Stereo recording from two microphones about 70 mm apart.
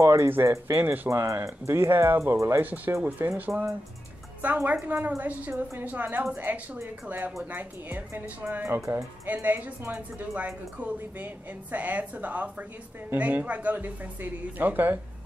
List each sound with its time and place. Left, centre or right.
0.0 s speech: right
2.6 s a woman's voice: right
9.3 s a woman's voice: right